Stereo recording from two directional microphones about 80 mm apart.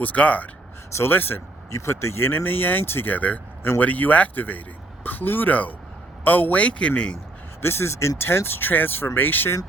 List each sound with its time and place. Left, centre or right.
0.0 s speech: centre
1.7 s a man's voice: left; by 7.2 s centre
7.6 s speech: left